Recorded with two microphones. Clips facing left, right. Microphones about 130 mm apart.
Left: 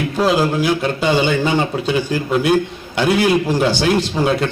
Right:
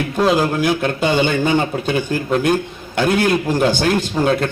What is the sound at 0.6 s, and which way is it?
A man's voice, 50° right (ahead or behind).